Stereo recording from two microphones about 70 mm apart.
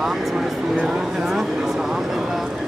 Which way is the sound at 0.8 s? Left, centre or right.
Centre.